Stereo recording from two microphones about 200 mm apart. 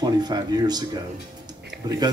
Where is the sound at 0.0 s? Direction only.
20° right (ahead or behind).